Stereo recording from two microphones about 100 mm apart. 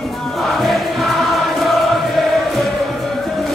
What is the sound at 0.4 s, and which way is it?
Music, centre (ahead or behind).